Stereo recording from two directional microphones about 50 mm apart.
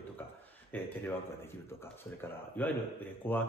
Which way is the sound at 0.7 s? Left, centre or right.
Left.